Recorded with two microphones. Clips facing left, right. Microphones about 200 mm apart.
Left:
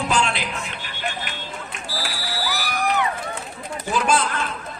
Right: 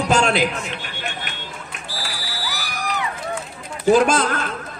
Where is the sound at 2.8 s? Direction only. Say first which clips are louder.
Left 4 dB; 55° left (ahead or behind).